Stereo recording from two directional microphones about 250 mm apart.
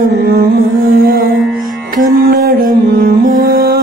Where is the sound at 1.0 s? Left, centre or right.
Right.